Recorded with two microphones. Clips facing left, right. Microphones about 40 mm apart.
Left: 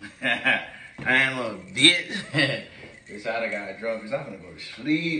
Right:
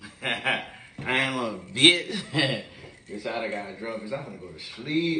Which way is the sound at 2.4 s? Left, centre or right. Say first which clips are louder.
Left 1 dB; left.